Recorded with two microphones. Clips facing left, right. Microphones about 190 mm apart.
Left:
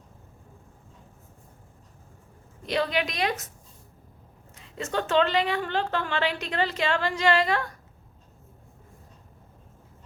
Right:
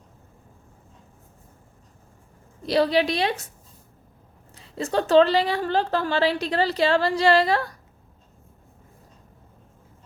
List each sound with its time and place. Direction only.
2.6 s a woman's voice: 35° right (ahead or behind)
4.5 s a woman's voice: 35° right (ahead or behind)